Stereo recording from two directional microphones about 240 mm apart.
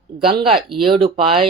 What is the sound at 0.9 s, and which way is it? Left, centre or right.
Speech, right.